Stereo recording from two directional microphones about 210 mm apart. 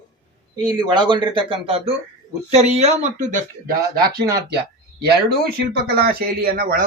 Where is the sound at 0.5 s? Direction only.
20° right (ahead or behind); by 3.4 s 35° right (ahead or behind).